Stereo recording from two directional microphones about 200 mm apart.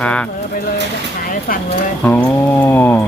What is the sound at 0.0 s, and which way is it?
Speech, 5° left (ahead or behind).